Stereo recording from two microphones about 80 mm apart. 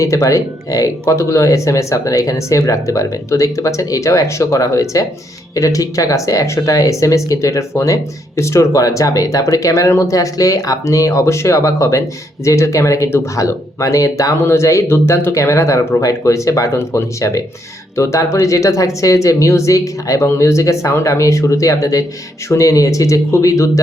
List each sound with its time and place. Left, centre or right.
0.0 s speech: left